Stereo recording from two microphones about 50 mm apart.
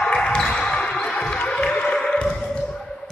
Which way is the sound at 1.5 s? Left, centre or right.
Centre.